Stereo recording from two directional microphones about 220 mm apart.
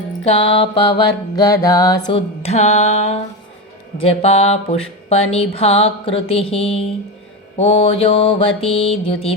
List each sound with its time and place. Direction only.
0.3 s music: 25° left (ahead or behind)